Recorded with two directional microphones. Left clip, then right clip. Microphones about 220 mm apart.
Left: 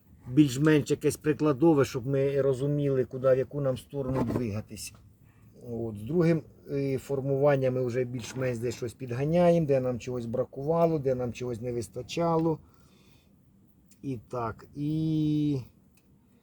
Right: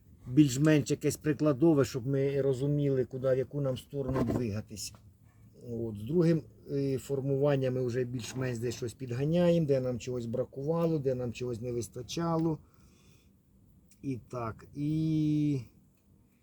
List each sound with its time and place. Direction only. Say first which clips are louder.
0.3 s speech: left 2 dB; 10° right (ahead or behind)
14.0 s speech: left 4 dB; 5° right (ahead or behind)